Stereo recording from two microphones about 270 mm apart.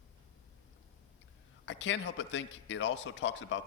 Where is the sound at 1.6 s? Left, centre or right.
Left.